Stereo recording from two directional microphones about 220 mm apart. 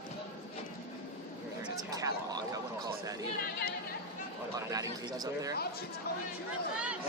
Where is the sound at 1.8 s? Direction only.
15° right (ahead or behind).